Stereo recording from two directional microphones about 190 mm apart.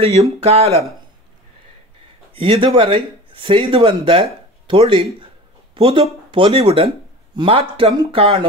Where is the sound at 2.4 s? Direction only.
25° right (ahead or behind).